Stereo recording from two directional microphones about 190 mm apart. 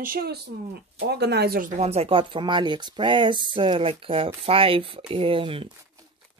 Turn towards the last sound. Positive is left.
turn(degrees=-30)  # may be behind; listen again after turning